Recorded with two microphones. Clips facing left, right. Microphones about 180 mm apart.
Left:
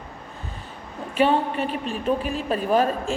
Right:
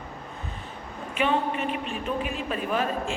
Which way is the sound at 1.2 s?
35° left (ahead or behind).